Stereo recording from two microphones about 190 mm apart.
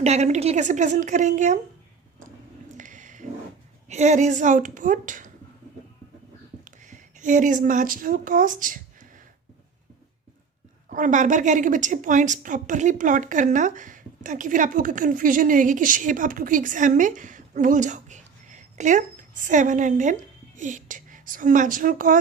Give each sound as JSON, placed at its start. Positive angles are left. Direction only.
{"t": 0.0, "sound": "a woman's voice", "side_deg": -35}
{"t": 2.7, "sound": "a sound", "side_deg": -40}
{"t": 3.8, "sound": "a woman's voice", "side_deg": -40}
{"t": 6.7, "sound": "speech", "side_deg": -40}
{"t": 10.8, "sound": "a woman's voice", "side_deg": -45}